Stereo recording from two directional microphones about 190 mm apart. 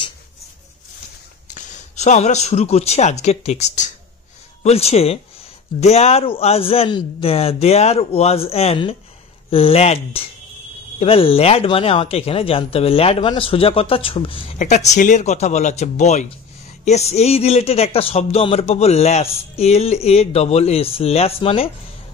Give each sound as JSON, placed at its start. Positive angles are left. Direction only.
{"t": 1.5, "sound": "speech", "side_deg": 35}